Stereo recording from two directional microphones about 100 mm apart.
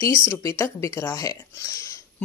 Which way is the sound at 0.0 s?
25° left (ahead or behind).